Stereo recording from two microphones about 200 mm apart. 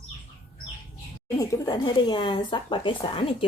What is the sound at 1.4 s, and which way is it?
Speech, 20° left (ahead or behind).